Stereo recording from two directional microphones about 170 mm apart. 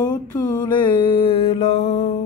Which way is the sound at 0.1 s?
20° left (ahead or behind).